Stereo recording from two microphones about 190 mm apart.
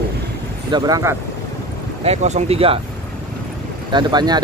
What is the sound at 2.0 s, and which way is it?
Speech, 35° right (ahead or behind).